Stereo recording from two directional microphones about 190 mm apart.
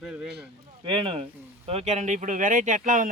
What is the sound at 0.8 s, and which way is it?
Speech, 30° right (ahead or behind).